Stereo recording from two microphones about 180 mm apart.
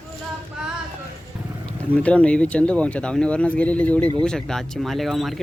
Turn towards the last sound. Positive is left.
turn(degrees=0)  # may be behind; listen again after turning